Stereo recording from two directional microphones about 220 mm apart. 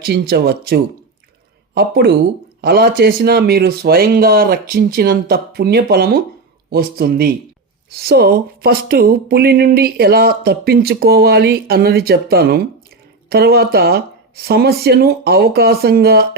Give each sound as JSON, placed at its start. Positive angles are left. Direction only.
{"t": 0.0, "sound": "speech", "side_deg": -45}